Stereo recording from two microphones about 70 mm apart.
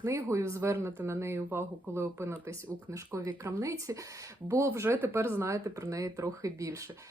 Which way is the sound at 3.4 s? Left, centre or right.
Right.